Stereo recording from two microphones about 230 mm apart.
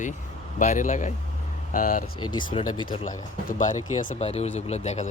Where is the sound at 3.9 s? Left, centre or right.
Left.